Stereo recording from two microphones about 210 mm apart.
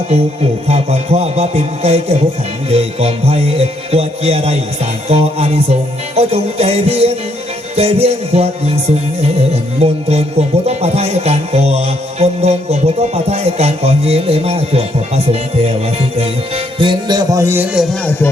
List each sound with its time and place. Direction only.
0.7 s music: 30° right (ahead or behind)
9.8 s music: 30° right (ahead or behind)
16.7 s music: 20° right (ahead or behind)